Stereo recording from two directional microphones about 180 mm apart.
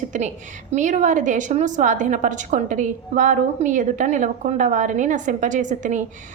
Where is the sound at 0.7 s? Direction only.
45° right (ahead or behind).